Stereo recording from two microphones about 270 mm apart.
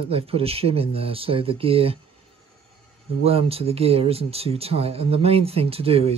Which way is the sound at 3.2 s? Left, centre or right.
Right.